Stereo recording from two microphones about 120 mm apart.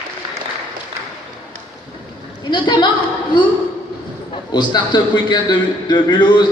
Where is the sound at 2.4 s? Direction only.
40° left (ahead or behind).